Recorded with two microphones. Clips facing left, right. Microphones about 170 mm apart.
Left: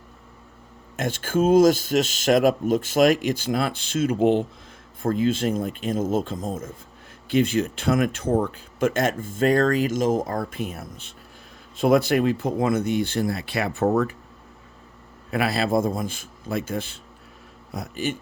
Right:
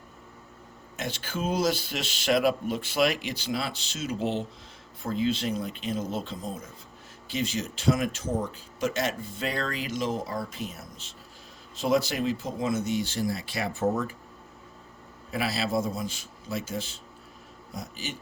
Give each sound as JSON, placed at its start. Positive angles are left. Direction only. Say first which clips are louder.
{"t": 0.9, "sound": "speech", "louder": "left 10 dB", "side_deg": 50}
{"t": 15.3, "sound": "speech", "louder": "left 6 dB", "side_deg": 55}